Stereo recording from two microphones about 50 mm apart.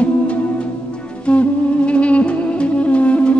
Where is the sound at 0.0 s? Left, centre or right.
Left.